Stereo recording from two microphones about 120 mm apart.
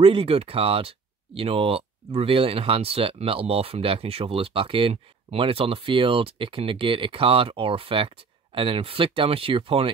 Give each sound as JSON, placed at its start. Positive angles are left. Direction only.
{"t": 0.0, "sound": "speech", "side_deg": -50}